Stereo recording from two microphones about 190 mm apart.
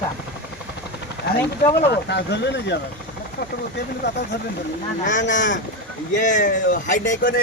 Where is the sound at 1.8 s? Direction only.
60° left (ahead or behind).